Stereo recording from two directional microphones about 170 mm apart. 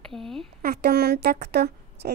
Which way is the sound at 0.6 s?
65° right (ahead or behind).